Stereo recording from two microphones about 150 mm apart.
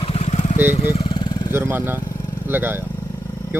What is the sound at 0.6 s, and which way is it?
Speech, 15° right (ahead or behind).